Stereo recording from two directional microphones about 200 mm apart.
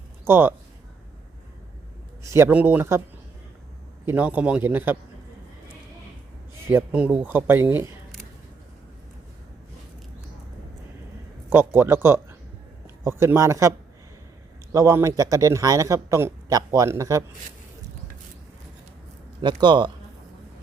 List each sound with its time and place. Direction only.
0.3 s a man's voice: 10° right (ahead or behind)
2.2 s a man's voice: 15° right (ahead or behind)
4.0 s a man's voice: 10° right (ahead or behind)
6.7 s a man's voice: 10° right (ahead or behind)
11.4 s a man's voice: 10° right (ahead or behind)
19.4 s speech: 20° right (ahead or behind)